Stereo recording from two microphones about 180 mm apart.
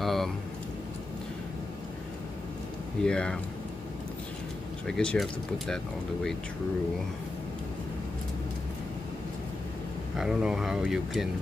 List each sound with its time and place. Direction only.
0.0 s a sound: centre (ahead or behind)
3.0 s speech: 5° left (ahead or behind)
4.8 s speech: 5° left (ahead or behind)
10.1 s speech: 5° right (ahead or behind)